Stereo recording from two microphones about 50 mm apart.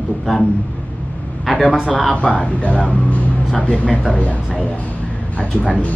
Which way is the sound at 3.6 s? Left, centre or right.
Centre.